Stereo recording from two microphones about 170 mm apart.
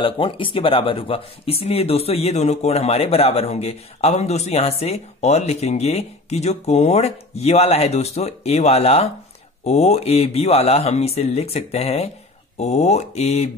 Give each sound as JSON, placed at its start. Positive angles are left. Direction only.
{"t": 0.0, "sound": "speech", "side_deg": 30}